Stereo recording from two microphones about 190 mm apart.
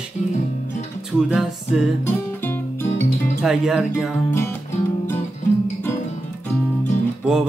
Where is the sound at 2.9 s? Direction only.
40° left (ahead or behind).